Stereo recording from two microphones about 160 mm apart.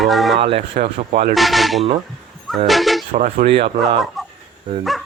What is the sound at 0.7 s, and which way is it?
Speech, 55° right (ahead or behind).